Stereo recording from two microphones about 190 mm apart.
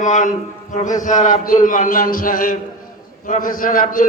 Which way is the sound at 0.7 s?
40° left (ahead or behind).